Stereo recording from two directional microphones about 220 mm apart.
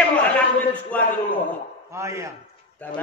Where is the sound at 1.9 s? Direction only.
15° right (ahead or behind).